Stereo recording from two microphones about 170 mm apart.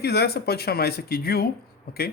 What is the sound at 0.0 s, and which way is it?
Speech, 70° left (ahead or behind).